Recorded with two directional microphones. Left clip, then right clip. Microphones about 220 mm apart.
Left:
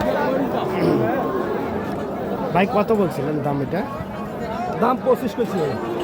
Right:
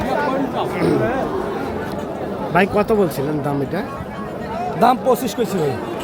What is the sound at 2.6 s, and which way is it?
Speech, 15° right (ahead or behind).